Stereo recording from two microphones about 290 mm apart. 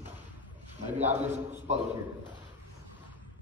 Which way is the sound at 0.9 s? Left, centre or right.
Right.